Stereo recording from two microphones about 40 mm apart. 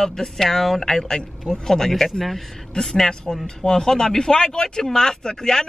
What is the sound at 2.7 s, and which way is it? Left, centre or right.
Speech, centre.